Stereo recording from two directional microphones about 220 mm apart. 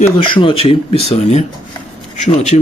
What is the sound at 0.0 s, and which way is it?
A man's voice, 25° left (ahead or behind).